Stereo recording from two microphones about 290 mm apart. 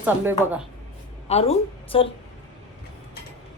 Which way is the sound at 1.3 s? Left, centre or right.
Left.